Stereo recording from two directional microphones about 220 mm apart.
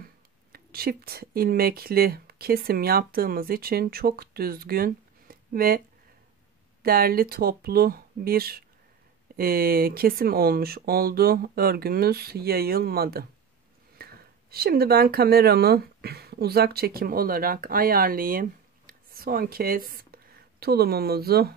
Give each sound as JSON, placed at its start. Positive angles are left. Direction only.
{"t": 0.0, "sound": "speech", "side_deg": -45}
{"t": 6.8, "sound": "speech", "side_deg": -40}